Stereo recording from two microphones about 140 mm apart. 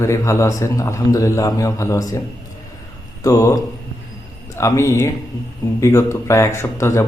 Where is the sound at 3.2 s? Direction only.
20° left (ahead or behind).